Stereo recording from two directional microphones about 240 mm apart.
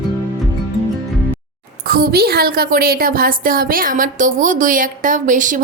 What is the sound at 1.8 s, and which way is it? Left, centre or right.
A woman's voice, right.